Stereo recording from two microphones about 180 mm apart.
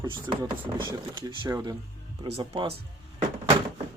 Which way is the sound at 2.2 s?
35° right (ahead or behind).